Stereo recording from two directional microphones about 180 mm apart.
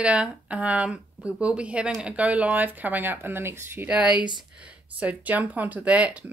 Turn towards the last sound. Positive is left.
turn(degrees=-5)  # may be behind; listen again after turning